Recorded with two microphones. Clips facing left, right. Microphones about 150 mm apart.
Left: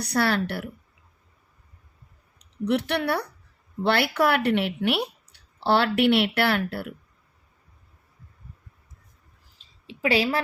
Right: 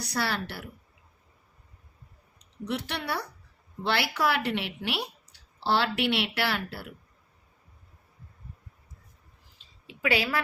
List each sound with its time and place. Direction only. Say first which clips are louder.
0.0 s speech: left 7 dB; 60° left (ahead or behind)
2.6 s speech: left 8 dB; 60° left (ahead or behind)
9.8 s a sound: left 5 dB; 30° left (ahead or behind)